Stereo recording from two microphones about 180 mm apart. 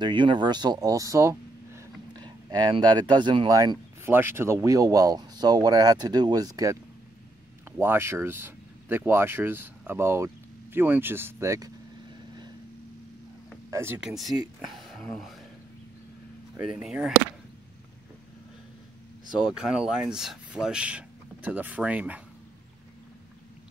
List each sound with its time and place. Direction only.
0.0 s speech: 25° right (ahead or behind)
13.7 s speech: 15° right (ahead or behind)
14.0 s speech: centre (ahead or behind)
16.6 s speech: 5° right (ahead or behind)
19.3 s speech: 5° right (ahead or behind)